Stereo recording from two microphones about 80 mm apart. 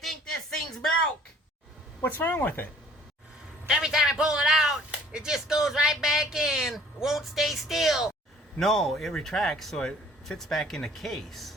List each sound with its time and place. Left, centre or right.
0.0 s a sound: centre
2.0 s speech: left
3.7 s a man's voice: centre